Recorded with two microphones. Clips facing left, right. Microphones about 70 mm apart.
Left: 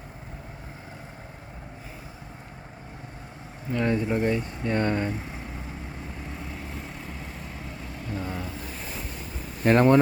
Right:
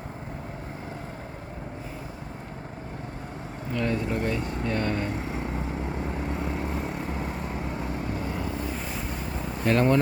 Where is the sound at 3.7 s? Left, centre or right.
Centre.